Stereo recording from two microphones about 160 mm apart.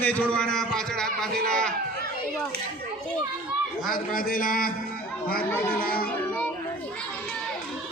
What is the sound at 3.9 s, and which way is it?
Speech, 60° left (ahead or behind).